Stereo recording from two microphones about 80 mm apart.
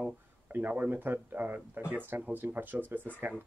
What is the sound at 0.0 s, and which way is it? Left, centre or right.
Speech, right.